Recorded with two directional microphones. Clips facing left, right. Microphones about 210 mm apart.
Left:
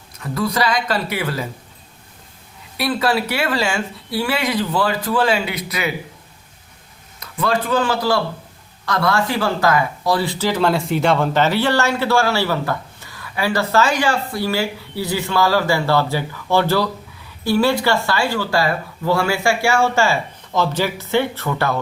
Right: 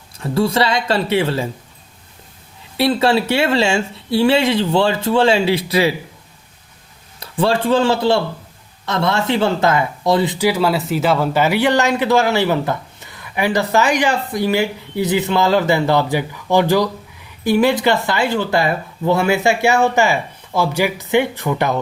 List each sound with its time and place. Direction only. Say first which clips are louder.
0.2 s speech: right 4 dB; 30° right (ahead or behind)
2.7 s speech: right 4 dB; 25° right (ahead or behind)
7.2 s speech: right 3 dB; 30° right (ahead or behind)